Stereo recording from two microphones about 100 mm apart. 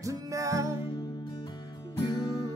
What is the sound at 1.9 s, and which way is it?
Music, 40° left (ahead or behind).